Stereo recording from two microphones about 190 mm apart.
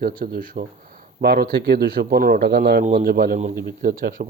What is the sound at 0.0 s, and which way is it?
Speech, 50° right (ahead or behind).